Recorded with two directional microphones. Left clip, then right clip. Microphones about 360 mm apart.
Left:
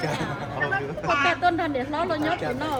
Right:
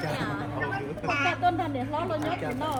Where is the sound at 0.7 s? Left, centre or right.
Centre.